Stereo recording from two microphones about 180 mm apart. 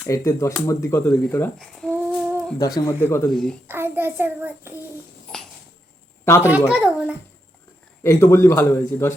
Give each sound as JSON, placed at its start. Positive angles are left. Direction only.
{"t": 0.0, "sound": "a man's voice", "side_deg": 15}
{"t": 1.9, "sound": "child singing", "side_deg": -10}
{"t": 2.6, "sound": "a man's voice", "side_deg": 20}
{"t": 3.2, "sound": "a child's voice", "side_deg": 5}
{"t": 3.7, "sound": "child singing", "side_deg": -10}
{"t": 6.2, "sound": "a woman's voice", "side_deg": 15}
{"t": 6.7, "sound": "a child's voice", "side_deg": -5}
{"t": 8.0, "sound": "a man's voice", "side_deg": 15}